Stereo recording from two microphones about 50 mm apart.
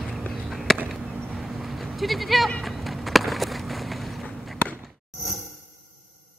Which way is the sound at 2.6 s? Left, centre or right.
Centre.